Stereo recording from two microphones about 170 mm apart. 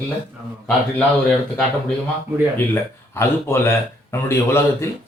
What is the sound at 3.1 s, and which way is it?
A man's voice, 15° left (ahead or behind).